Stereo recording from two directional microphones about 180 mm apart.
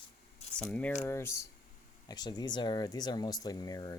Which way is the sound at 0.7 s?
10° left (ahead or behind).